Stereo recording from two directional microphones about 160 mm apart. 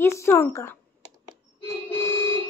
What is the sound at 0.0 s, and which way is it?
Speech, 15° left (ahead or behind).